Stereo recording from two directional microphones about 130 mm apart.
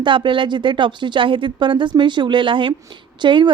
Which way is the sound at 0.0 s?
40° right (ahead or behind).